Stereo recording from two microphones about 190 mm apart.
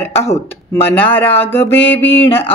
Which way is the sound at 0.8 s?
10° left (ahead or behind).